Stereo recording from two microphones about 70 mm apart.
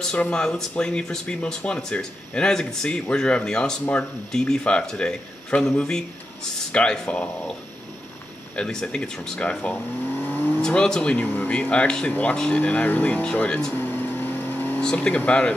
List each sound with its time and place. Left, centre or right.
0.0 s speech: centre
8.5 s speech: centre
10.1 s vehicle: left
10.6 s speech: centre
11.1 s speech: left
13.7 s vehicle: left
15.0 s speech: left